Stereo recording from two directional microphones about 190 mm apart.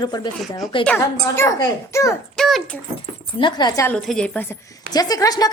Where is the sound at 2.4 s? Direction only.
Centre (ahead or behind).